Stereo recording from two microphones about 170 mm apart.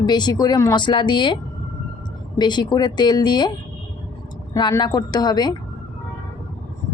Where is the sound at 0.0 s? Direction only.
25° left (ahead or behind).